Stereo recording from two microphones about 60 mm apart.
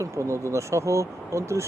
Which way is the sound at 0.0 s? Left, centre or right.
Right.